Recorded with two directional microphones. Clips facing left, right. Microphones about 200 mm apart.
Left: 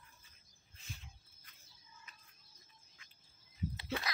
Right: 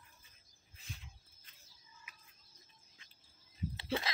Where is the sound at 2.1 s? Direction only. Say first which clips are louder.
Even; 10° right (ahead or behind).